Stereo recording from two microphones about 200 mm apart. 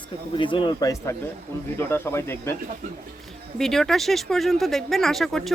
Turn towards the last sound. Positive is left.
turn(degrees=0)  # may be behind; listen again after turning